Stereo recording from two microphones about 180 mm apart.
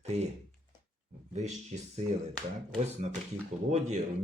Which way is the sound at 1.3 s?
40° right (ahead or behind).